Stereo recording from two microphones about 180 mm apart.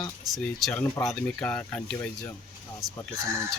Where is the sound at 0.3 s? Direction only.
Centre (ahead or behind).